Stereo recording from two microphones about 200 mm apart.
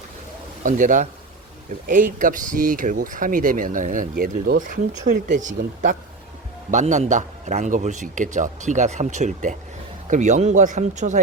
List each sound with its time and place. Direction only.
0.6 s a man's voice: 40° right (ahead or behind)